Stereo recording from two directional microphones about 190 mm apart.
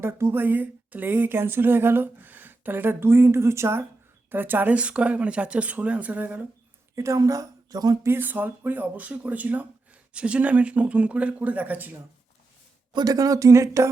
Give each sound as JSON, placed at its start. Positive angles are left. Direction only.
{"t": 0.0, "sound": "speech", "side_deg": -10}
{"t": 12.9, "sound": "speech", "side_deg": -20}